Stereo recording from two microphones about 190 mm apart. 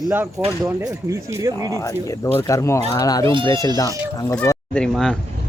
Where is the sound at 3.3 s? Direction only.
25° right (ahead or behind).